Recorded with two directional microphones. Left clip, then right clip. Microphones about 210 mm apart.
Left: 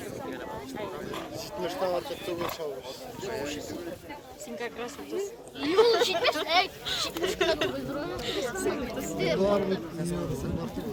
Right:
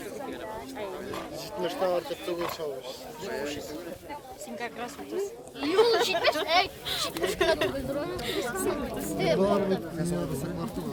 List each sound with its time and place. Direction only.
1.6 s speech: 40° right (ahead or behind)
3.2 s speech: 50° right (ahead or behind)
5.5 s speech: 45° right (ahead or behind)